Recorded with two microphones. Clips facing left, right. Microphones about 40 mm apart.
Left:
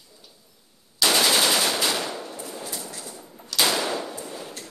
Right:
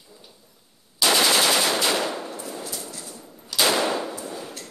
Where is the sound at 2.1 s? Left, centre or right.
Centre.